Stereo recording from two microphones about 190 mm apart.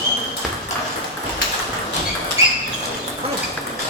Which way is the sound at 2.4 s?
15° right (ahead or behind).